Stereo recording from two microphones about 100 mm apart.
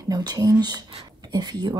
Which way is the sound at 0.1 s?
40° right (ahead or behind).